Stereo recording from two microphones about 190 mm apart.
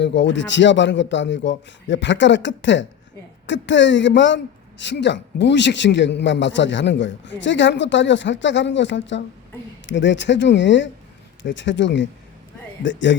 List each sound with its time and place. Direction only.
0.0 s a man's voice: 70° left (ahead or behind)